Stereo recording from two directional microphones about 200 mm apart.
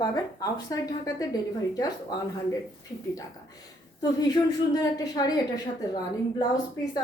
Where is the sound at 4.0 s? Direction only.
20° left (ahead or behind).